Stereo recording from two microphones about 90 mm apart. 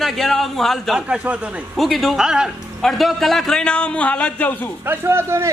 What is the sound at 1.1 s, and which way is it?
Speech, 15° right (ahead or behind).